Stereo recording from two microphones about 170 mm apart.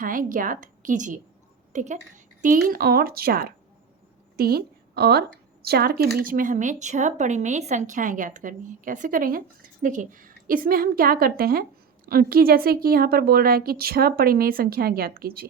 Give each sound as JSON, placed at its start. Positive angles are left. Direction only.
{"t": 0.0, "sound": "a woman's voice", "side_deg": -55}